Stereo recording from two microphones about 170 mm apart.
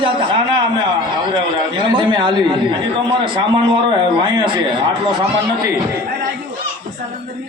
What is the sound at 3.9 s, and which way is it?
A man's voice, 25° right (ahead or behind).